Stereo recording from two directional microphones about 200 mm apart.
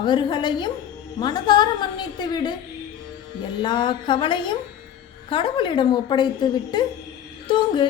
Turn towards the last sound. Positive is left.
turn(degrees=20)  # may be behind; listen again after turning